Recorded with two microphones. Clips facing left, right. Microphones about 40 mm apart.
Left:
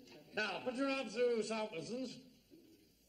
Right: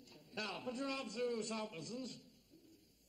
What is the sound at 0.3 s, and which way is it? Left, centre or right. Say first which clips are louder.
A man's voice: left 4 dB; left.